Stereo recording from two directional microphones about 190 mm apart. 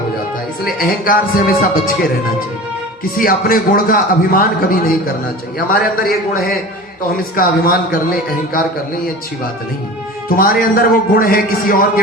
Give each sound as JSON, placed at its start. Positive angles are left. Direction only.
{"t": 0.6, "sound": "speech", "side_deg": 50}
{"t": 10.2, "sound": "speech", "side_deg": 50}